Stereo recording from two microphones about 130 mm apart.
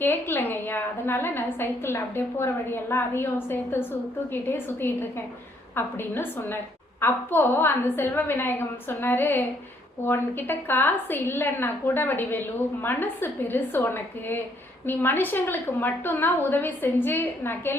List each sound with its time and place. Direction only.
0.0 s a woman's voice: 15° left (ahead or behind)